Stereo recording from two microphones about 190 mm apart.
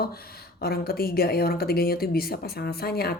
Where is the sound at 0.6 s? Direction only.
55° left (ahead or behind).